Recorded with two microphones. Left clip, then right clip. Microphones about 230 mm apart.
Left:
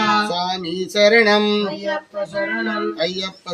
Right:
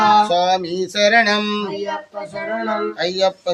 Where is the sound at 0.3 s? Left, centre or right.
Centre.